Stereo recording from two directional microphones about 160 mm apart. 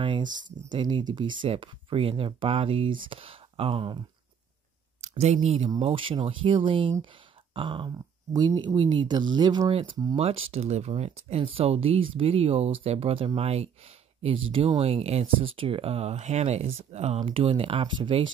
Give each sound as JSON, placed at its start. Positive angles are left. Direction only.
{"t": 0.0, "sound": "speech", "side_deg": -30}
{"t": 5.0, "sound": "speech", "side_deg": -45}
{"t": 10.1, "sound": "speech", "side_deg": -40}